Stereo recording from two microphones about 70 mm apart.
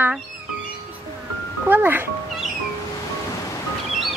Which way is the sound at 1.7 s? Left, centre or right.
Right.